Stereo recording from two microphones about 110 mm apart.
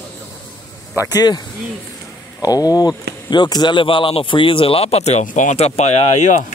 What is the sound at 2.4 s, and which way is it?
Speech, 35° left (ahead or behind).